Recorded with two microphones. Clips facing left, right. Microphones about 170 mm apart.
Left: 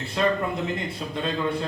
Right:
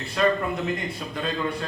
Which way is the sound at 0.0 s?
25° left (ahead or behind).